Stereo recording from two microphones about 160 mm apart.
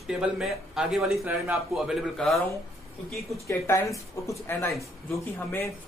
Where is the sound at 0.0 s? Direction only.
Centre (ahead or behind).